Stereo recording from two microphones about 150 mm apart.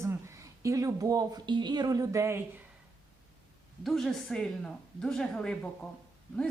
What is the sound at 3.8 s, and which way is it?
Speech, centre (ahead or behind).